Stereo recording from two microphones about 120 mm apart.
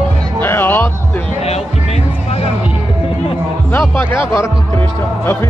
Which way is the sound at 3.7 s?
20° left (ahead or behind).